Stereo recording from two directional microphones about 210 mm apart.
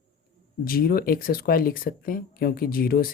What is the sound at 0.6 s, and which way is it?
Speech, 45° left (ahead or behind).